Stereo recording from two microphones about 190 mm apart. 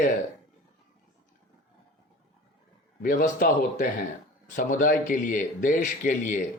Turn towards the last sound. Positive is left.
turn(degrees=45)  # may be behind; listen again after turning